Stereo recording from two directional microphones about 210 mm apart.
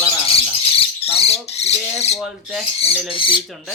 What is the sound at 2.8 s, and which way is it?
Bird, 25° left (ahead or behind).